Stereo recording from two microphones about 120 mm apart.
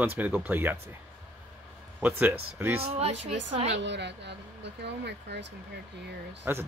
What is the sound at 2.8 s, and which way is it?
Speech, 55° right (ahead or behind).